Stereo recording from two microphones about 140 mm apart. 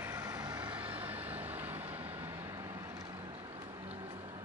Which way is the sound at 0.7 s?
10° right (ahead or behind).